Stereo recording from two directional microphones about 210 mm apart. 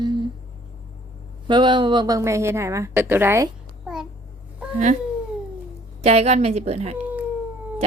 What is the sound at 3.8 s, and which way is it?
Babbling, centre (ahead or behind).